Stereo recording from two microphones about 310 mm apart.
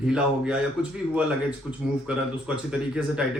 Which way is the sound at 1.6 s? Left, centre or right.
Centre.